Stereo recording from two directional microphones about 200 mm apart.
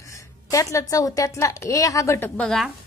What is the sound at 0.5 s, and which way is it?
A woman's voice, 15° left (ahead or behind).